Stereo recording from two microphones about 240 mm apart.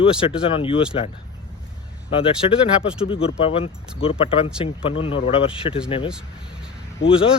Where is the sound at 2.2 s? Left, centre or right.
Left.